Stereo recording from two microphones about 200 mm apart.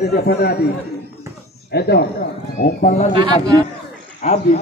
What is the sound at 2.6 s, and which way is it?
Speech, 40° left (ahead or behind).